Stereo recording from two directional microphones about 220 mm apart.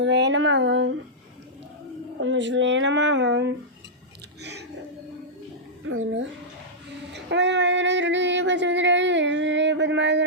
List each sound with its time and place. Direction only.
0.0 s speech: 55° right (ahead or behind)
2.2 s speech: 55° right (ahead or behind)
5.8 s speech: 65° right (ahead or behind)
7.1 s child singing: 55° right (ahead or behind)